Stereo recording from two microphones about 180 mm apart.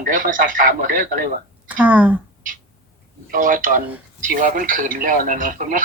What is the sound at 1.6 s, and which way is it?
Speech, 10° right (ahead or behind).